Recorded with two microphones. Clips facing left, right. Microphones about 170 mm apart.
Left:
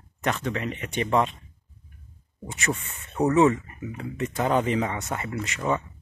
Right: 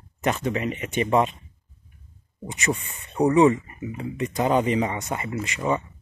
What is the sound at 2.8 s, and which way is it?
Speech, 15° right (ahead or behind).